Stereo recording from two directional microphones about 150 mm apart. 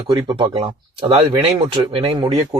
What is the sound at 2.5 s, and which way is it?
Speech, 20° right (ahead or behind).